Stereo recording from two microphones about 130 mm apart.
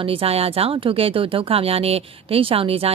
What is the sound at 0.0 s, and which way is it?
Speech, 45° right (ahead or behind).